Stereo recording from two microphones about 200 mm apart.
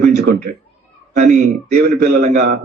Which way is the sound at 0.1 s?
55° right (ahead or behind).